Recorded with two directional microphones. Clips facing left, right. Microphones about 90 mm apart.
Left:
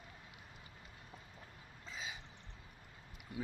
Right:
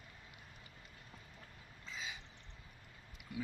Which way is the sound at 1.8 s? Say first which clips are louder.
Even; 30° left (ahead or behind).